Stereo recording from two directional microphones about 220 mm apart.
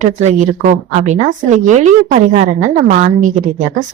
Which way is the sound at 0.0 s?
30° right (ahead or behind).